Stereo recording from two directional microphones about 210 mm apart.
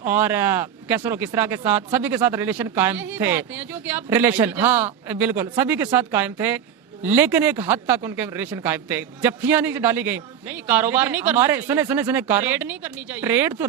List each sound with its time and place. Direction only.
0.0 s speech: 10° right (ahead or behind)